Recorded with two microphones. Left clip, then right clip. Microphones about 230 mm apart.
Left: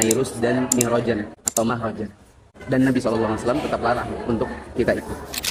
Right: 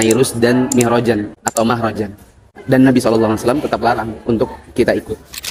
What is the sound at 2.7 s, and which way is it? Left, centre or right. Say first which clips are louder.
A man's voice: right 8 dB; right.